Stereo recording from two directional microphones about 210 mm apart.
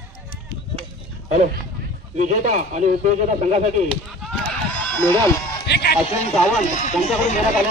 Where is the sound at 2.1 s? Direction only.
35° right (ahead or behind).